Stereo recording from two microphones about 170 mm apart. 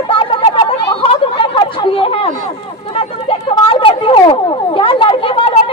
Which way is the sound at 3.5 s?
30° left (ahead or behind).